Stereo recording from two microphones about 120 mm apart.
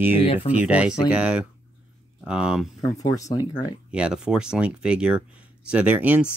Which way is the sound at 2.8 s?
30° left (ahead or behind).